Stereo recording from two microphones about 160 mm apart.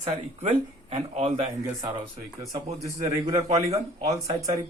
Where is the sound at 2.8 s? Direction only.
20° right (ahead or behind).